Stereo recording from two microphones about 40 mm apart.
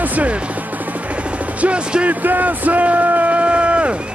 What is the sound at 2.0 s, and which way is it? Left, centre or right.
Speech, right.